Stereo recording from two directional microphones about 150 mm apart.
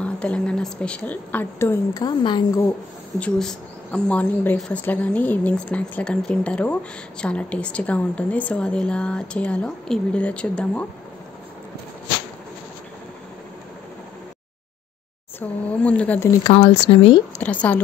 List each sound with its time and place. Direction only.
0.0 s speech: 10° left (ahead or behind)
2.0 s a woman's voice: 30° left (ahead or behind)
3.2 s speech: 5° left (ahead or behind)
15.4 s speech: 10° left (ahead or behind)
16.8 s speech: 35° left (ahead or behind)
17.4 s speech: 10° left (ahead or behind)